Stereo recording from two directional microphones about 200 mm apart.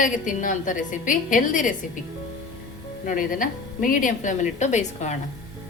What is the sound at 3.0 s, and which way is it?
A woman's voice, 40° left (ahead or behind).